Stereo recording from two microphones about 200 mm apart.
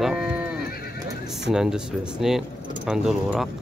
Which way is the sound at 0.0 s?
5° right (ahead or behind).